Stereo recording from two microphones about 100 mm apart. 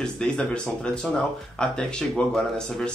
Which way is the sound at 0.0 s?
10° left (ahead or behind).